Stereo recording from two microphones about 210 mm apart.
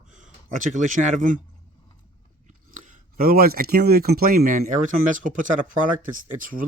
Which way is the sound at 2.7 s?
35° right (ahead or behind).